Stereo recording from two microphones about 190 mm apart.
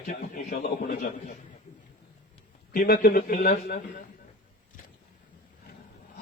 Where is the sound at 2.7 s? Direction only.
45° left (ahead or behind).